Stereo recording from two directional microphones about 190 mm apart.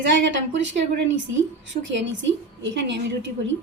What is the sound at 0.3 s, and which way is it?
A woman's voice, 75° right (ahead or behind).